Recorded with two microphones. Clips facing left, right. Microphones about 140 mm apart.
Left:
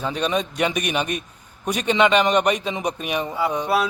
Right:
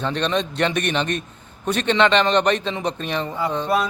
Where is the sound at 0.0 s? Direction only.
10° left (ahead or behind).